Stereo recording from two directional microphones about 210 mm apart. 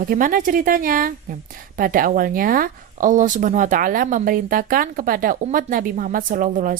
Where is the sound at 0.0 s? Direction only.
40° right (ahead or behind).